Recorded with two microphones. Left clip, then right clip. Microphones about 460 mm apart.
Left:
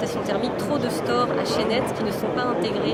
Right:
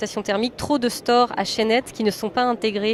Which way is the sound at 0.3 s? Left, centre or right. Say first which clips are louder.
Right 5 dB; right.